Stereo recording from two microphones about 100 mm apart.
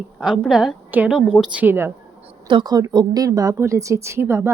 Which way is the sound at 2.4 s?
50° right (ahead or behind).